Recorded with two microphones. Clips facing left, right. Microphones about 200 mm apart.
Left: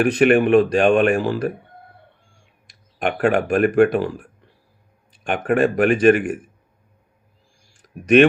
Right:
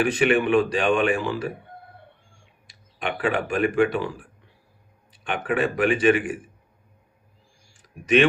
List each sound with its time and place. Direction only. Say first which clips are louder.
0.0 s speech: left 5 dB; 45° left (ahead or behind)
3.0 s speech: left 6 dB; 50° left (ahead or behind)
5.2 s speech: left 6 dB; 45° left (ahead or behind)
7.7 s clicking: left 5 dB; 55° left (ahead or behind)